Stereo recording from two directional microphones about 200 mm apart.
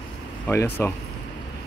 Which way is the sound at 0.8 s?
10° left (ahead or behind).